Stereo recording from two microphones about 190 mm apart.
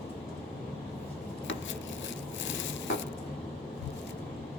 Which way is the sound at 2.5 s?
75° left (ahead or behind).